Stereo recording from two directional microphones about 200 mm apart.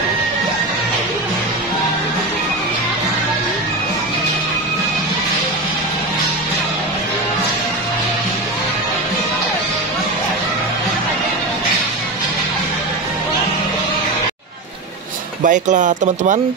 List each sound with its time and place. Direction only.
15.4 s speech: 40° right (ahead or behind)